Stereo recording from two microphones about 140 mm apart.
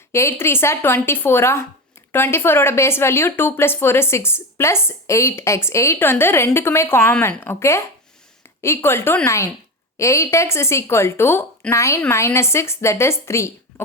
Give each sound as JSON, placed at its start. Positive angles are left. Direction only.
{"t": 0.1, "sound": "a woman's voice", "side_deg": 20}